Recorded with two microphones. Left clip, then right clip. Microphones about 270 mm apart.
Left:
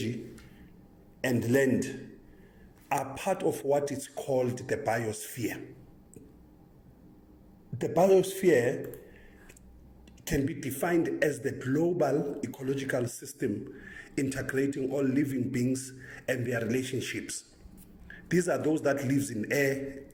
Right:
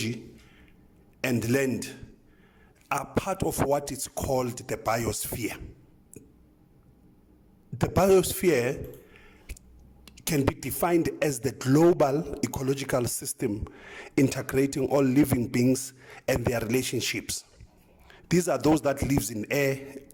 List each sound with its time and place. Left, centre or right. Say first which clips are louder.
1.2 s a man's voice: even; right
8.4 s a sound: even; right
10.1 s a man's voice: right 4 dB; right
18.3 s a man's voice: right 4 dB; right